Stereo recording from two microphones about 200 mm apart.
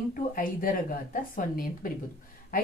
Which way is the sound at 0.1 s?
45° left (ahead or behind).